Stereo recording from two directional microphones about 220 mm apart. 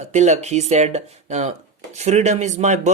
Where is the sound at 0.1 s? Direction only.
30° right (ahead or behind).